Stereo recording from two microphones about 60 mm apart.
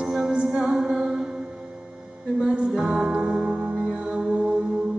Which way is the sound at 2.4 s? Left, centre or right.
Centre.